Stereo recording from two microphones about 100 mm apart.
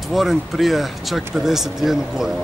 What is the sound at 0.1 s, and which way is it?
Speech, centre (ahead or behind).